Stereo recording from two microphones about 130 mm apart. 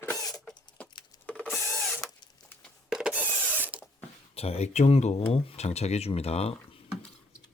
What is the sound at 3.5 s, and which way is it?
Ratchet, 10° right (ahead or behind).